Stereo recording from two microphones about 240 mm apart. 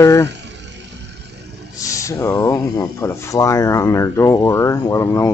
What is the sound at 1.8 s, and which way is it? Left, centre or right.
Speech, centre.